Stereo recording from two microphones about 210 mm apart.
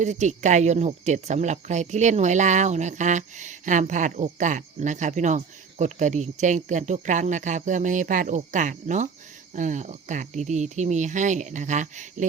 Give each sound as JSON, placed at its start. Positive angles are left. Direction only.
{"t": 0.0, "sound": "speech", "side_deg": -35}